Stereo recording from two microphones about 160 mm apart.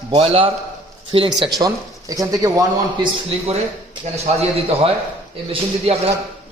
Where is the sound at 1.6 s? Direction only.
20° right (ahead or behind).